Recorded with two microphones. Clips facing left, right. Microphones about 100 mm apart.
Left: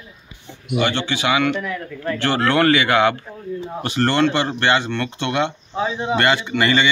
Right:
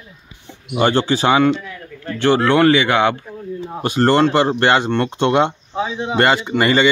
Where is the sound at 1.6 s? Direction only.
90° left.